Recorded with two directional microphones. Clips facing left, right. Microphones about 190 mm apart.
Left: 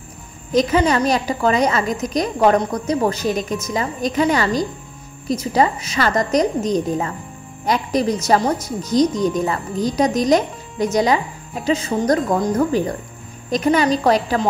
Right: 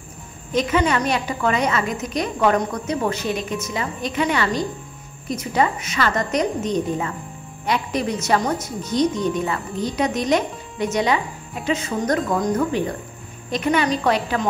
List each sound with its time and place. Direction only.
0.5 s speech: 35° left (ahead or behind)